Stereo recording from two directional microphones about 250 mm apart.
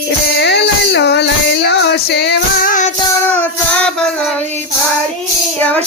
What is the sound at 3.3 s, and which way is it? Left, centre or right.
Music, centre.